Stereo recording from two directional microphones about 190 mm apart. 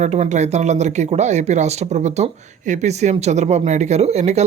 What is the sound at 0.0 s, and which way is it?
Speech, 35° right (ahead or behind).